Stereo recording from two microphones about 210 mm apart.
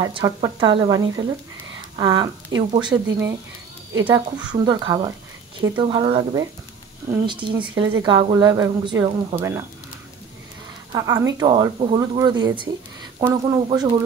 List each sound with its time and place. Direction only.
0.0 s speech: 15° right (ahead or behind)
7.6 s speech: 20° right (ahead or behind)
10.9 s speech: 15° right (ahead or behind)